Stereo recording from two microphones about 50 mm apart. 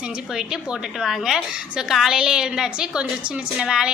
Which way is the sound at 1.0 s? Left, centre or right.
Centre.